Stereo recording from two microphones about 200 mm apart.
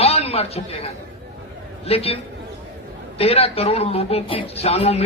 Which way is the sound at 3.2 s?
30° left (ahead or behind).